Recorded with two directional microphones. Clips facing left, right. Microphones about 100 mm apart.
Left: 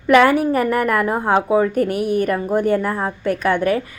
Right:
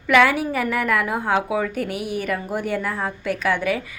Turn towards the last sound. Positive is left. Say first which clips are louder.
# left 4 dB
turn(degrees=45)  # may be behind; listen again after turning